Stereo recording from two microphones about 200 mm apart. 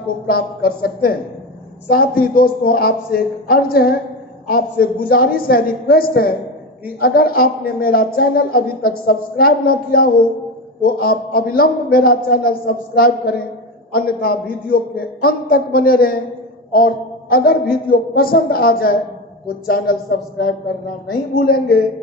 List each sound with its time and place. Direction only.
0.3 s a woman's voice: 50° left (ahead or behind)